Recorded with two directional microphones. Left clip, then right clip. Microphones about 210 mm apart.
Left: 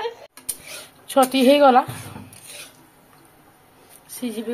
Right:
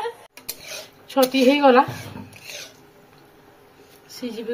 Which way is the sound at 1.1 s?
40° left (ahead or behind).